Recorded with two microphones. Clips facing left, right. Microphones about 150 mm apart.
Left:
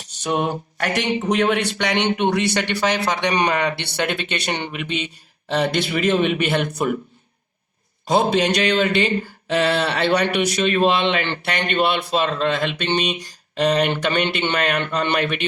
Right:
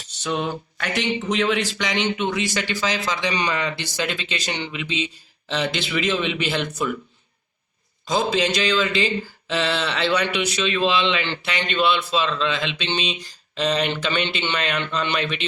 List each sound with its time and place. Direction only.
0.2 s mantra: 60° left (ahead or behind)
8.0 s mantra: 65° left (ahead or behind)